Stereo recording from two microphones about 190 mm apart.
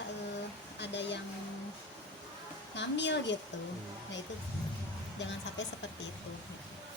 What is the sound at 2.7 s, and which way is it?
Speech, 70° left (ahead or behind).